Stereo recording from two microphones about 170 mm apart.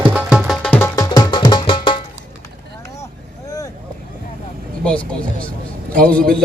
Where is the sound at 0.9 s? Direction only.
20° left (ahead or behind).